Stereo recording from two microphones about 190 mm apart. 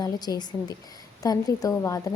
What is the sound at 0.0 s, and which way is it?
A woman's voice, 20° left (ahead or behind).